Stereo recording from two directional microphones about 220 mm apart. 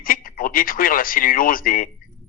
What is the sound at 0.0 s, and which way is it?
A man's voice, 40° left (ahead or behind).